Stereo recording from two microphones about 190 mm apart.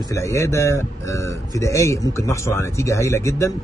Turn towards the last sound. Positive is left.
turn(degrees=15)  # may be behind; listen again after turning